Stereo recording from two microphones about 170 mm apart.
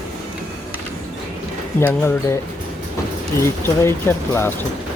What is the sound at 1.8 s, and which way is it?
Speech, 10° left (ahead or behind).